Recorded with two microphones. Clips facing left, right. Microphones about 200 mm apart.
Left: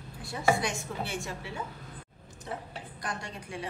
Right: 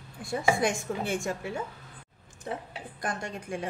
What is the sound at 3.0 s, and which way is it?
Speech, 50° right (ahead or behind).